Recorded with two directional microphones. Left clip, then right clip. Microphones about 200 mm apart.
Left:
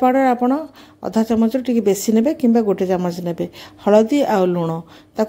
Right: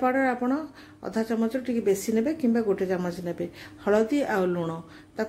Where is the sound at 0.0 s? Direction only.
35° left (ahead or behind).